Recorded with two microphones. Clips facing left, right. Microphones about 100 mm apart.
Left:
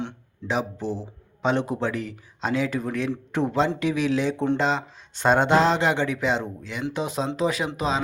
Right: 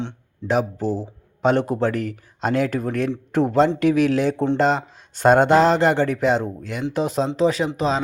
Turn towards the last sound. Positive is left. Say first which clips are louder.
# right 4 dB
turn(degrees=-35)  # may be behind; listen again after turning